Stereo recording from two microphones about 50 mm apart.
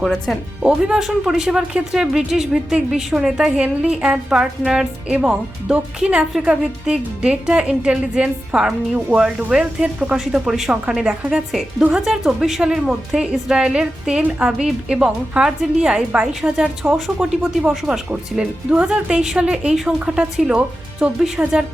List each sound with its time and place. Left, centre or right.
0.0 s speech: centre
0.8 s a woman's voice: centre
12.0 s a woman's voice: centre